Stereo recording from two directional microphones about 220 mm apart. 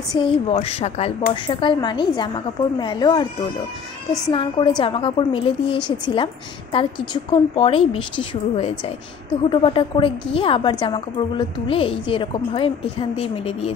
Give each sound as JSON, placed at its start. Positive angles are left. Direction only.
{"t": 0.1, "sound": "a woman's voice", "side_deg": 25}
{"t": 4.3, "sound": "a woman's voice", "side_deg": 25}